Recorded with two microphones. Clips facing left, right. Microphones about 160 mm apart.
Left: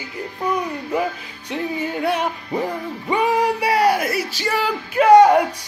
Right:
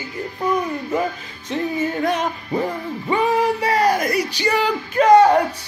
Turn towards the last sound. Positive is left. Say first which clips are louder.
# left 1 dB
turn(degrees=10)  # may be behind; listen again after turning